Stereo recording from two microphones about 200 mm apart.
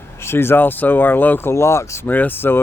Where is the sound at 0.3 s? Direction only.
10° left (ahead or behind).